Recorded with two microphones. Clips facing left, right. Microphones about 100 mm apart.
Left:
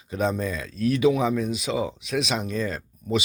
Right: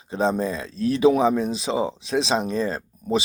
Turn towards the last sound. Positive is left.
turn(degrees=-35)  # may be behind; listen again after turning